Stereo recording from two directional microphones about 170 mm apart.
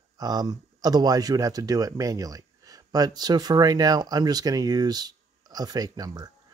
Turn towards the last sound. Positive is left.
turn(degrees=-20)  # may be behind; listen again after turning